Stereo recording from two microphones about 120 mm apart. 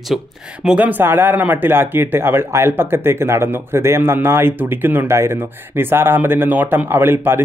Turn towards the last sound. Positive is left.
turn(degrees=-20)  # may be behind; listen again after turning